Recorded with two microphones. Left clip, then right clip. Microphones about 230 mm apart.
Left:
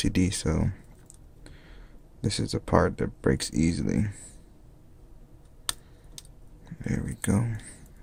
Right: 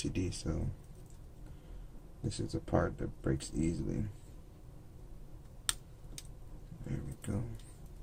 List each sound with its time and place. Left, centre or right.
0.0 s speech: left
2.2 s speech: left
6.8 s speech: left